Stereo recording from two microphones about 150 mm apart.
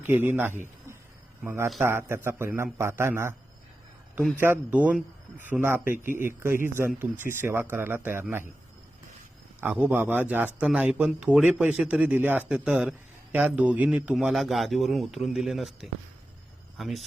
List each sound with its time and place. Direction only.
0.0 s speech: 15° right (ahead or behind)
4.4 s speech: 15° right (ahead or behind)
9.6 s a man's voice: 15° right (ahead or behind)